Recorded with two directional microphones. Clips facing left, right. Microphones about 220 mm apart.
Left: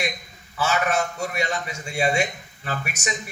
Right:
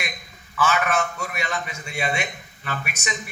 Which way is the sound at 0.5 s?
40° left (ahead or behind).